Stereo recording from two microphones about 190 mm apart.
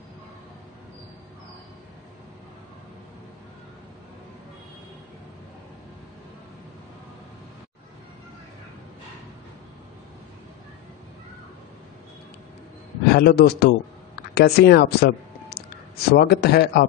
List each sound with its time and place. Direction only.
13.1 s a man's voice: 55° left (ahead or behind)